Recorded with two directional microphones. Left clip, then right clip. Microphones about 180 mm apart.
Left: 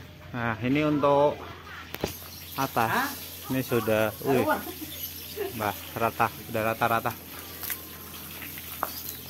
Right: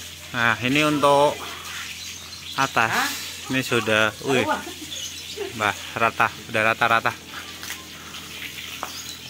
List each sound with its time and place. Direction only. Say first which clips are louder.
0.3 s speech: right 8 dB; 5° right (ahead or behind)
2.5 s a man's voice: right 5 dB; 5° right (ahead or behind)
5.6 s a man's voice: right 7 dB; 5° right (ahead or behind)